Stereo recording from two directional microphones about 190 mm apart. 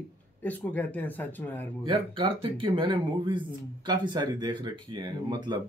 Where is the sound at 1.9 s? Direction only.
25° right (ahead or behind).